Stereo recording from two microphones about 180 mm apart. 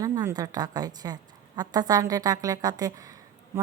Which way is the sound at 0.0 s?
20° right (ahead or behind).